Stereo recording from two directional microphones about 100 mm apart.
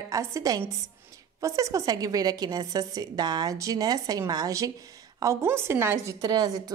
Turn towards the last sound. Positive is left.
turn(degrees=-35)  # may be behind; listen again after turning